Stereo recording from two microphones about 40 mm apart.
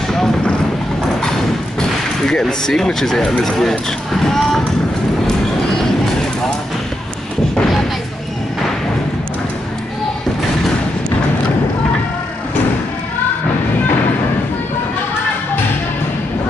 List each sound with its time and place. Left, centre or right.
1.8 s a sound: centre
2.6 s speech: centre
4.1 s boat: centre